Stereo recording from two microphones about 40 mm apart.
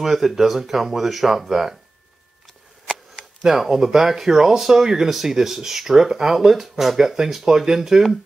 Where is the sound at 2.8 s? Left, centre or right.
Centre.